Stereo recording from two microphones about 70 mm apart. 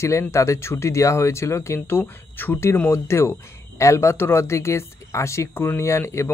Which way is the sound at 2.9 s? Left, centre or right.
Left.